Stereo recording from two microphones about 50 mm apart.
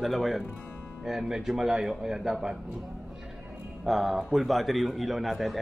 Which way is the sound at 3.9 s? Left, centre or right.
Centre.